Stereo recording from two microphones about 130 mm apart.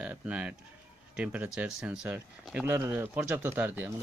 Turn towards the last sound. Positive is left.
turn(degrees=-15)  # may be behind; listen again after turning